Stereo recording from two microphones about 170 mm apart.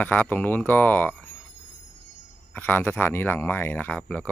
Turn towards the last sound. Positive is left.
turn(degrees=5)  # may be behind; listen again after turning